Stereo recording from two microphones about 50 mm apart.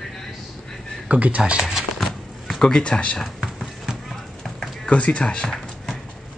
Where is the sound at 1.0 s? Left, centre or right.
Right.